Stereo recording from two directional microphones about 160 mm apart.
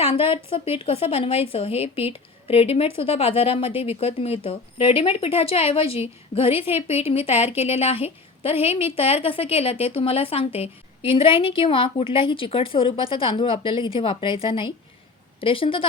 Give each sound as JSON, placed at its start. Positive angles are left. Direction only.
{"t": 0.3, "sound": "a woman's voice", "side_deg": 35}